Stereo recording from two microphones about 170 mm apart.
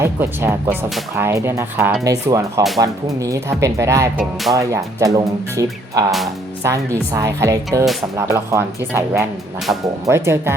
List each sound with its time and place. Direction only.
0.0 s speech: 15° right (ahead or behind)
6.1 s speech: centre (ahead or behind)
6.6 s speech: 15° right (ahead or behind)